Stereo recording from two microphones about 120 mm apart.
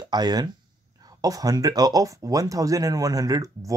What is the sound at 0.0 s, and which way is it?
Speech, 35° right (ahead or behind).